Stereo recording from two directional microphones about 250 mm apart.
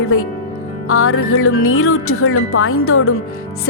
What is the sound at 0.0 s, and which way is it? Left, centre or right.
Speech, left.